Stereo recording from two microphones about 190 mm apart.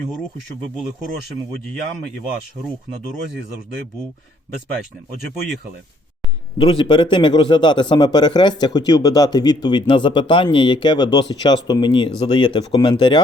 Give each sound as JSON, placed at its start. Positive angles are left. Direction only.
{"t": 6.6, "sound": "speech", "side_deg": 25}